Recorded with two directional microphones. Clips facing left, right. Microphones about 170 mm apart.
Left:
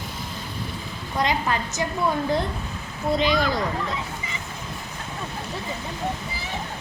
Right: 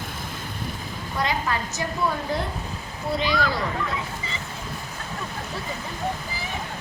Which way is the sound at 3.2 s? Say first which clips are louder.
Left 2 dB; 20° left (ahead or behind).